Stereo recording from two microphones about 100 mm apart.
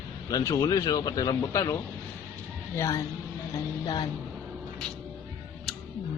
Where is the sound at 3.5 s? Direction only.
40° left (ahead or behind).